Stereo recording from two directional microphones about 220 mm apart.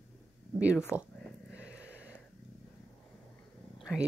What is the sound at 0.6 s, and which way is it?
Speech, 5° right (ahead or behind).